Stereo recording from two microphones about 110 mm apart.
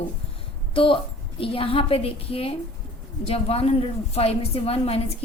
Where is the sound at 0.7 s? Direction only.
55° left (ahead or behind).